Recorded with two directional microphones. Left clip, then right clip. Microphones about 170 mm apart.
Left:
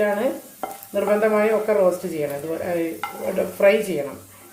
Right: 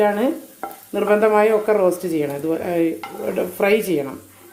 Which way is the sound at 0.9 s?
60° right (ahead or behind).